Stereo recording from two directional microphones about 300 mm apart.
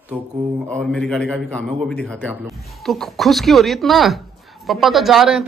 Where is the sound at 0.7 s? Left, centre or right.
Centre.